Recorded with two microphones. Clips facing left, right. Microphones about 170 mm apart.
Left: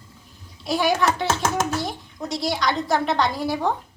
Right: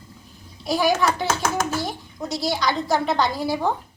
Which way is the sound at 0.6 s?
Centre (ahead or behind).